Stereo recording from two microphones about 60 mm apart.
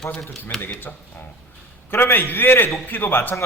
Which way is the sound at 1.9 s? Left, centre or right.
Left.